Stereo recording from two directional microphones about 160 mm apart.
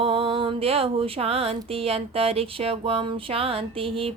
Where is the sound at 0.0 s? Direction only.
35° right (ahead or behind).